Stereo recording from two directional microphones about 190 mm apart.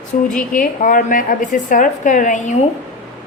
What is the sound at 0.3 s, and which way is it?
A woman's voice, 45° left (ahead or behind).